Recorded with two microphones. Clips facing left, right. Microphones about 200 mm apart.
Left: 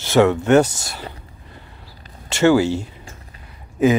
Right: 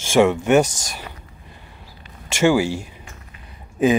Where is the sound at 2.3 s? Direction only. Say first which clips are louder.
Left 2 dB; 10° right (ahead or behind).